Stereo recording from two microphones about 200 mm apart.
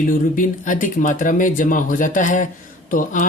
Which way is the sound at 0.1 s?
40° left (ahead or behind).